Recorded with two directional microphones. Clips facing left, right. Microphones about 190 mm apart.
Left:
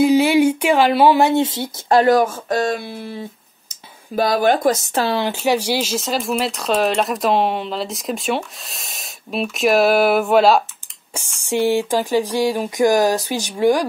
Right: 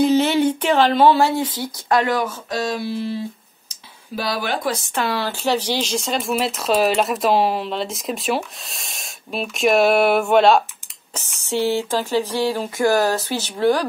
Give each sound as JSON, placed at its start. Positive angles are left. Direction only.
{"t": 0.0, "sound": "speech", "side_deg": 10}
{"t": 2.0, "sound": "speech", "side_deg": 45}
{"t": 4.1, "sound": "speech", "side_deg": 50}
{"t": 5.1, "sound": "speech", "side_deg": 15}
{"t": 11.1, "sound": "speech", "side_deg": 10}